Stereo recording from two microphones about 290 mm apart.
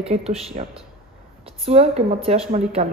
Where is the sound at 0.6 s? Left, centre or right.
Right.